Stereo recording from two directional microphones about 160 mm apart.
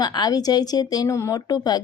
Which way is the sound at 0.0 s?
25° left (ahead or behind).